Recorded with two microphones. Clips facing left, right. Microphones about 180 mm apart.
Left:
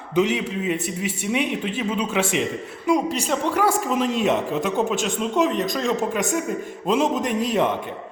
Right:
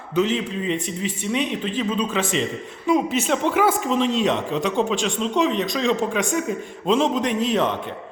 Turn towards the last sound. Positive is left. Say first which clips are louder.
# right 1 dB
turn(degrees=45)  # may be behind; listen again after turning